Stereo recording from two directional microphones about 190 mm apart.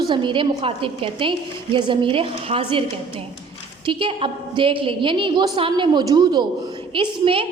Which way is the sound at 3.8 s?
25° right (ahead or behind).